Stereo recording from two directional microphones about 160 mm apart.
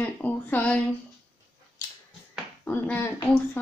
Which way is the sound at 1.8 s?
20° left (ahead or behind).